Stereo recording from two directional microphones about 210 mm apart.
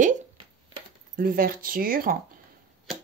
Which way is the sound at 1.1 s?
45° right (ahead or behind).